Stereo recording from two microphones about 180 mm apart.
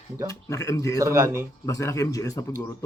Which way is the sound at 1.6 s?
15° left (ahead or behind).